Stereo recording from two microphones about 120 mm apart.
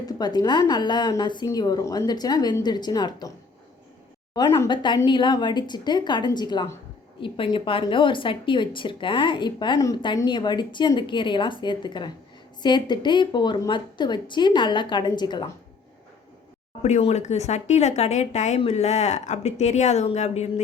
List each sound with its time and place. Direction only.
0.0 s a woman's voice: 35° left (ahead or behind)
4.4 s a woman's voice: 35° left (ahead or behind)
16.8 s speech: 70° left (ahead or behind)